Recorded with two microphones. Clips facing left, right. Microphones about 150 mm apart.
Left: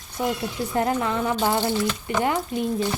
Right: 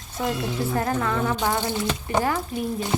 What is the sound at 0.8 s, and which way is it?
Speech, 20° left (ahead or behind).